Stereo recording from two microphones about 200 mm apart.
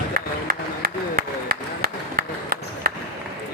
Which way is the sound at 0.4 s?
50° right (ahead or behind).